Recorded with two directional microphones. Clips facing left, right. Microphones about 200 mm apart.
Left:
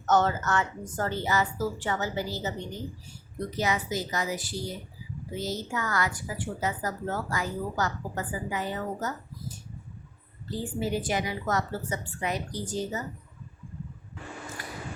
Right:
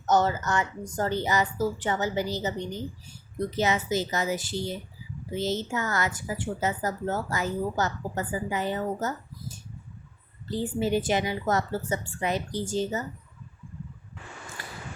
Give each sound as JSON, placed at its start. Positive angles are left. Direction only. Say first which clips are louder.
{"t": 0.0, "sound": "a woman's voice", "louder": "right 1 dB", "side_deg": -10}
{"t": 14.6, "sound": "scissors", "louder": "left 2 dB", "side_deg": -30}